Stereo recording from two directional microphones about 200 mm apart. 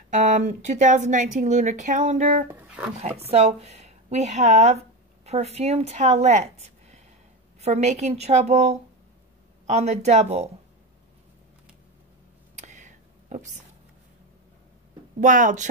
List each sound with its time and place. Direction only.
0.2 s speech: 35° right (ahead or behind)
2.4 s a sound: 5° right (ahead or behind)
3.3 s speech: 30° right (ahead or behind)
12.5 s whispering: 35° right (ahead or behind)
15.1 s speech: 40° right (ahead or behind)